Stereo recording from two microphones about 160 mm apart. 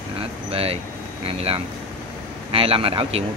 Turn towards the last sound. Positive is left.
turn(degrees=-35)  # may be behind; listen again after turning